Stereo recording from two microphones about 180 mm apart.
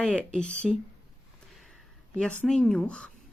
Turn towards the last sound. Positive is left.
turn(degrees=5)  # may be behind; listen again after turning